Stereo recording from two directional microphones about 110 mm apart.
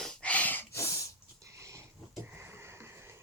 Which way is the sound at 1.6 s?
30° right (ahead or behind).